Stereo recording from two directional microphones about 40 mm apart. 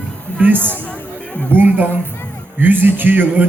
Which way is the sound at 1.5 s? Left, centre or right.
Right.